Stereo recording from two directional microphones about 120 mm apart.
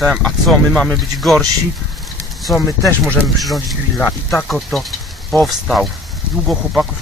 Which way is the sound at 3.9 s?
15° left (ahead or behind).